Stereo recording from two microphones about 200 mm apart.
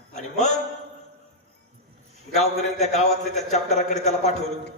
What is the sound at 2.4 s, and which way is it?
A man's voice, 35° left (ahead or behind).